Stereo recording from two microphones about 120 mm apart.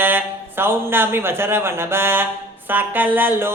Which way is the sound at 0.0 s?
15° right (ahead or behind).